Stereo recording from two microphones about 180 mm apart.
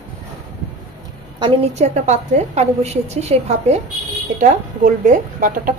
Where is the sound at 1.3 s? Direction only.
25° right (ahead or behind).